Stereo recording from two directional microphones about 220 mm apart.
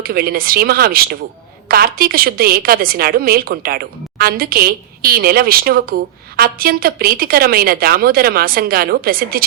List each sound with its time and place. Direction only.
0.0 s a woman's voice: 45° right (ahead or behind)